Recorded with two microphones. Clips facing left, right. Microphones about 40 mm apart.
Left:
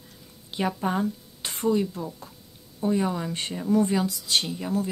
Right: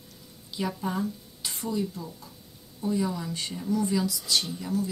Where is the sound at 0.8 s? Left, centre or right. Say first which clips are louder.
Left 4 dB; left.